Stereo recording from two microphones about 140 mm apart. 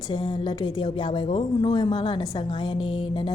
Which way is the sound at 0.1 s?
35° left (ahead or behind).